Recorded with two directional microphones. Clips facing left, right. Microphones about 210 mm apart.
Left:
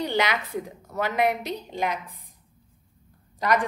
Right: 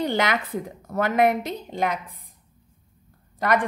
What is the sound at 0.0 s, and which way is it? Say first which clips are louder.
A woman's voice: right 2 dB; 50° right (ahead or behind).